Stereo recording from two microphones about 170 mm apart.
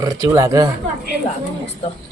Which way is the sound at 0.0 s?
20° right (ahead or behind).